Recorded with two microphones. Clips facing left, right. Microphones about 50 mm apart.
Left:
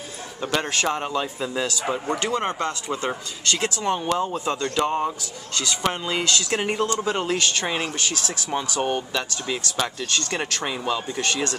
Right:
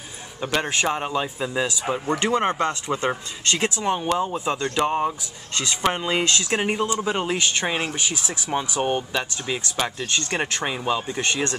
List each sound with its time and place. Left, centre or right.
0.4 s a man's voice: centre
5.5 s a man's voice: right